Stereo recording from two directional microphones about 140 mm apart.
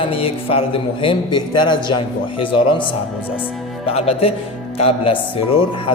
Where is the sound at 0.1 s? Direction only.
40° left (ahead or behind).